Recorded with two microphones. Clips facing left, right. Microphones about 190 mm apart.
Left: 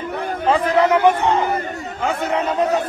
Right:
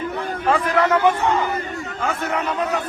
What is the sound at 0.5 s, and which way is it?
A man's voice, 20° left (ahead or behind).